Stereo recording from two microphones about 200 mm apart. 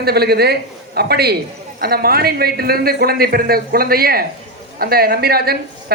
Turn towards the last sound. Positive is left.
turn(degrees=-50)  # may be behind; listen again after turning